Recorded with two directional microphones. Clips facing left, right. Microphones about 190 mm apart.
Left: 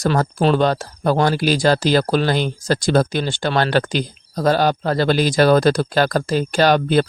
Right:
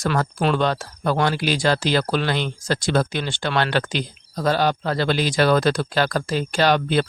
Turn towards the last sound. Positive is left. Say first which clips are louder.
# left 4 dB
turn(degrees=45)  # may be behind; listen again after turning